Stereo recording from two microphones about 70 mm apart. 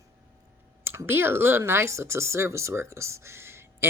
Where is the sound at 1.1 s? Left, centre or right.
Right.